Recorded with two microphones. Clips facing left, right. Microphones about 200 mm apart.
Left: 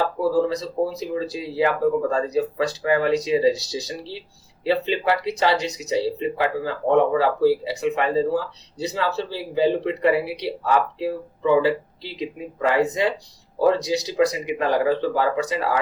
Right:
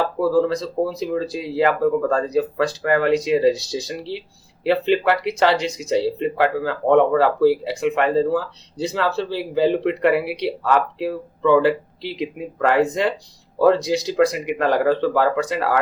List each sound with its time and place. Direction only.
0.4 s speech: 60° right (ahead or behind)
4.6 s speech: 60° right (ahead or behind)
12.2 s speech: 60° right (ahead or behind)